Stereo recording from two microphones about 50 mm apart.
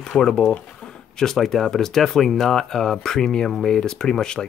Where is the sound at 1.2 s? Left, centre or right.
Centre.